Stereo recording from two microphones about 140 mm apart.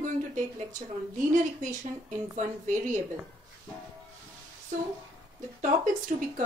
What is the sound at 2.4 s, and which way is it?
Speech, 65° right (ahead or behind).